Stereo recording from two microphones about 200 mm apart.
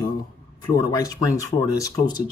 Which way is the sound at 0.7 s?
15° left (ahead or behind).